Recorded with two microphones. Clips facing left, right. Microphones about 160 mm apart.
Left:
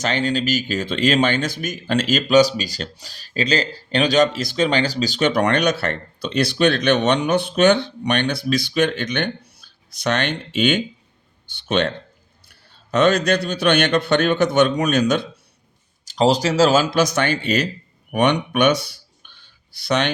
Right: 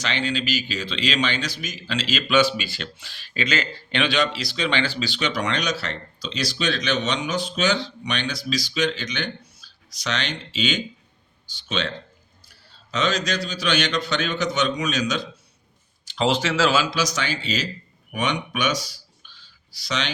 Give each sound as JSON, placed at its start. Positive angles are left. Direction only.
{"t": 0.0, "sound": "a man's voice", "side_deg": 45}
{"t": 16.0, "sound": "speech", "side_deg": 40}